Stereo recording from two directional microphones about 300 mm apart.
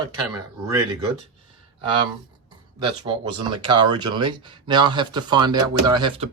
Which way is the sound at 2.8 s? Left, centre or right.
Centre.